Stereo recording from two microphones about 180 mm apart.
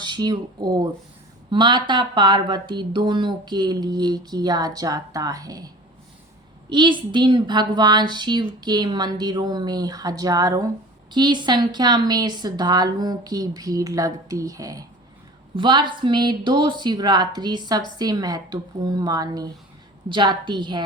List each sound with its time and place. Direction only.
0.0 s speech: 25° right (ahead or behind)